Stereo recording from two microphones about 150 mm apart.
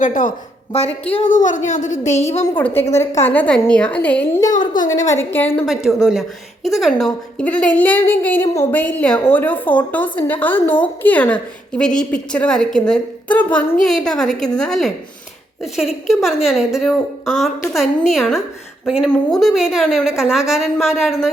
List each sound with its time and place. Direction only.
0.0 s a woman's voice: 65° left (ahead or behind)
0.7 s a woman's voice: 45° left (ahead or behind)
1.3 s a woman's voice: 60° left (ahead or behind)
2.6 s a woman's voice: 10° left (ahead or behind)
4.4 s a woman's voice: 25° left (ahead or behind)
5.6 s a woman's voice: centre (ahead or behind)